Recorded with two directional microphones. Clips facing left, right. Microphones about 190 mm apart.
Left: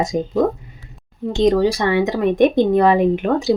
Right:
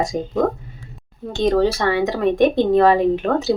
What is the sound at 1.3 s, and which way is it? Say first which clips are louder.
Speech: left 2 dB; 15° left (ahead or behind).